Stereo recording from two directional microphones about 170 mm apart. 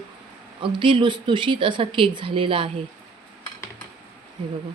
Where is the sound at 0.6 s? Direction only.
30° right (ahead or behind).